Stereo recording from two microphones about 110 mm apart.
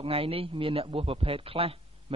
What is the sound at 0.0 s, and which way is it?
A man's voice, 60° right (ahead or behind).